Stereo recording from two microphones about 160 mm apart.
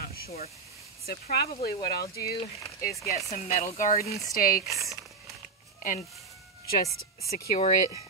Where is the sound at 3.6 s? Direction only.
60° left (ahead or behind).